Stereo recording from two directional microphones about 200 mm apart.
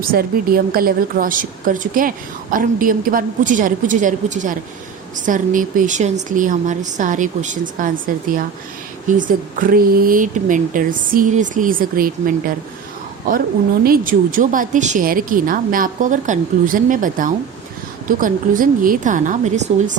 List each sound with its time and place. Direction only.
0.0 s a woman's voice: 45° right (ahead or behind)
13.8 s a woman's voice: 45° right (ahead or behind)